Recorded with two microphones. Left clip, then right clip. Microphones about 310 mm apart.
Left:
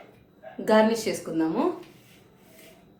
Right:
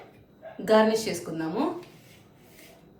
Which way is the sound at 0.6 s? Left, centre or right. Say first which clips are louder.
Even; centre.